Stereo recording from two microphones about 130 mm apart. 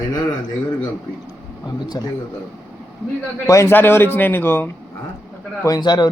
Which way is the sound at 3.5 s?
20° left (ahead or behind).